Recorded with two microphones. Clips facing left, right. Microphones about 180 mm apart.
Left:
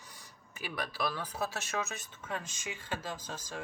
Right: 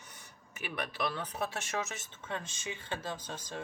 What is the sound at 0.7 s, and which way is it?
Speech, 25° right (ahead or behind).